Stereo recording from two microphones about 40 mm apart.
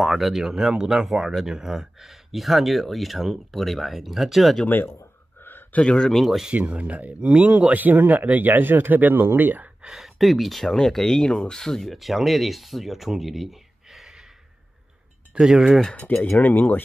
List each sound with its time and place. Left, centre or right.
0.0 s speech: centre
5.4 s a sound: left
5.8 s speech: left
6.0 s speech: centre
6.7 s speech: right
7.2 s speech: right
7.7 s speech: right
9.9 s speech: centre
11.9 s speech: centre
15.3 s speech: centre
16.2 s speech: left